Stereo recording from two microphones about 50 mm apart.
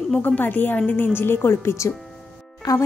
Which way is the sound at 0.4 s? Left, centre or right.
Left.